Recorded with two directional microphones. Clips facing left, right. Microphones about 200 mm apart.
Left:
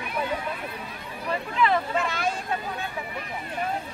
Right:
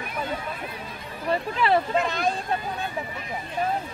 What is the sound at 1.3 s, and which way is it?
Speech, 35° right (ahead or behind).